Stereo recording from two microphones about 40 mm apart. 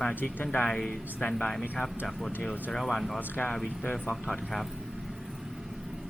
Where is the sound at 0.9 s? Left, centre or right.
Left.